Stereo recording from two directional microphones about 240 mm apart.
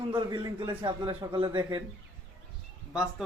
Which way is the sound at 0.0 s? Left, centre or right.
Centre.